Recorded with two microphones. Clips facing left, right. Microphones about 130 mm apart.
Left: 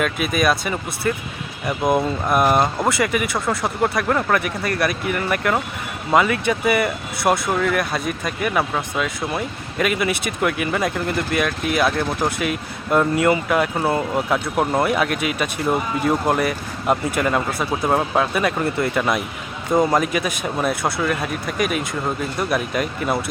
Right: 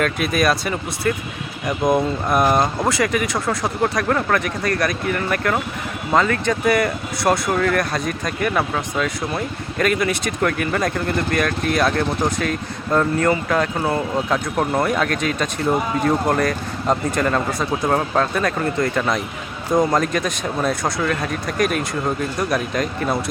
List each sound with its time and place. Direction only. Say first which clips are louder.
0.0 s speech: right 1 dB; centre (ahead or behind)